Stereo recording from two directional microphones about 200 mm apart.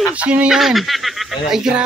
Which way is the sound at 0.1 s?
5° right (ahead or behind).